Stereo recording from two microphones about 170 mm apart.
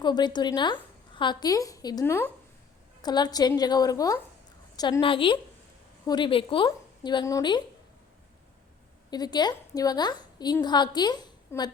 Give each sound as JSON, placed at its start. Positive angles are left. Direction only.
{"t": 0.0, "sound": "a woman's voice", "side_deg": 25}
{"t": 9.0, "sound": "a woman's voice", "side_deg": 25}